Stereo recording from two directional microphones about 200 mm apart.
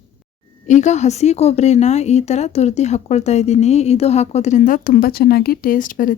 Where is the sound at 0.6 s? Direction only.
35° left (ahead or behind).